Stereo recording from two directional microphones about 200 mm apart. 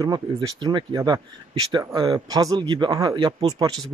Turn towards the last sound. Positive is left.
turn(degrees=-20)  # may be behind; listen again after turning